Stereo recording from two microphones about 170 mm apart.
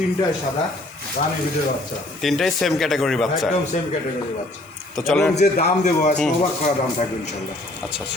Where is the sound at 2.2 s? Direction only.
Centre (ahead or behind).